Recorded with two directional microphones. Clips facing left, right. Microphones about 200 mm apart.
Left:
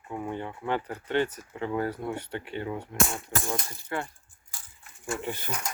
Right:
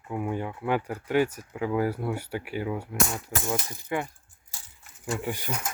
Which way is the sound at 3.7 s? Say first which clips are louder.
Right 3 dB; 15° right (ahead or behind).